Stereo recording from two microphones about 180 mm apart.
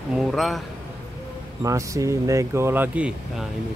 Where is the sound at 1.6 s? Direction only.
20° right (ahead or behind).